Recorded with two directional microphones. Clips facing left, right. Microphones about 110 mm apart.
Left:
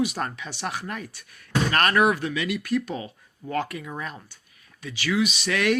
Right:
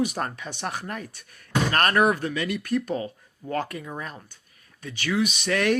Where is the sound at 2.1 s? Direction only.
45° right (ahead or behind).